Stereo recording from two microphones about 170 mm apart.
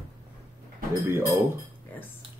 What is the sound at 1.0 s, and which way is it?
Speech, 15° right (ahead or behind).